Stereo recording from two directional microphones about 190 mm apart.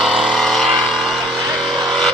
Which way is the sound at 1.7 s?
5° left (ahead or behind).